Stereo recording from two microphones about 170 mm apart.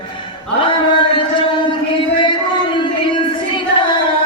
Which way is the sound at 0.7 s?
30° left (ahead or behind).